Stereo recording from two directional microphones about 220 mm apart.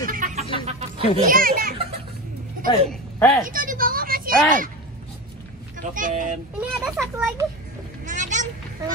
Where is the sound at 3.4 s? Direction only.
40° right (ahead or behind).